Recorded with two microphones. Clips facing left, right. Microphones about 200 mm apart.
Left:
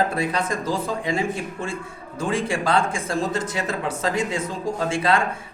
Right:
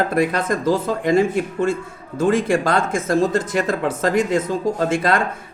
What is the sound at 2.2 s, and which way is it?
A woman's voice, 55° right (ahead or behind).